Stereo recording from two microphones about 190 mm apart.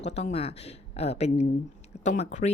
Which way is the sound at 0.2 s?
35° left (ahead or behind).